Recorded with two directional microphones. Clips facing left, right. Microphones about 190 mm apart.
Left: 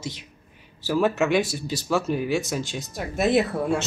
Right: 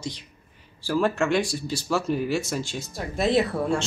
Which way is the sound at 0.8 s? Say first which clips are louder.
Left 1 dB; 5° left (ahead or behind).